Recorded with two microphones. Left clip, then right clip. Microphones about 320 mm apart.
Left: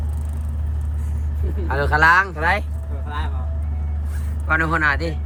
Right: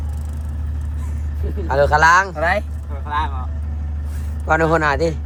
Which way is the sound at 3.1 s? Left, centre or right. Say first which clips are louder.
Right 9 dB; centre.